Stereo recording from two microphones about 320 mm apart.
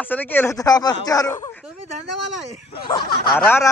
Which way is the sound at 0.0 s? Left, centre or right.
Centre.